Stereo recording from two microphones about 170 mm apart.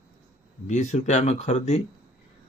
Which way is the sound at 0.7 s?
45° left (ahead or behind).